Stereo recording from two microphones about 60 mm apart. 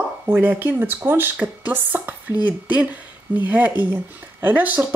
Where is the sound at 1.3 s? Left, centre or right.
Right.